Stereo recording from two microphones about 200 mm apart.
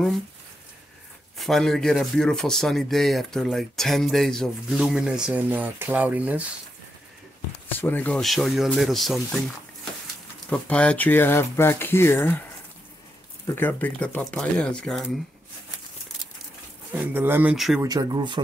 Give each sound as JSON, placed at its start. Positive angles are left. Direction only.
{"t": 1.4, "sound": "speech", "side_deg": 0}
{"t": 7.6, "sound": "speech", "side_deg": 10}
{"t": 10.5, "sound": "speech", "side_deg": 5}
{"t": 13.6, "sound": "speech", "side_deg": 10}
{"t": 16.9, "sound": "speech", "side_deg": -10}
{"t": 17.8, "sound": "speech", "side_deg": -20}